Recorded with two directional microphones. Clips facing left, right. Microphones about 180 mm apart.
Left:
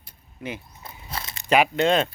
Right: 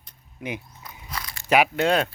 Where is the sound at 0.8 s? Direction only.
25° left (ahead or behind).